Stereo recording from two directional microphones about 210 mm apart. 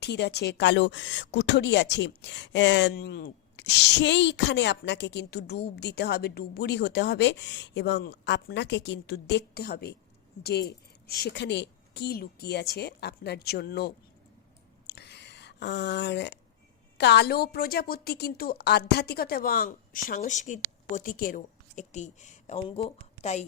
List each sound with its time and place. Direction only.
0.0 s a woman's voice: 55° left (ahead or behind)
14.8 s a sound: 55° left (ahead or behind)
17.0 s a woman's voice: 55° left (ahead or behind); by 23.5 s 35° left (ahead or behind)